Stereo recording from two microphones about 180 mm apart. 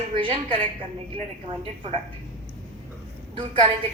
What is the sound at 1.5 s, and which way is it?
Speech, 30° right (ahead or behind).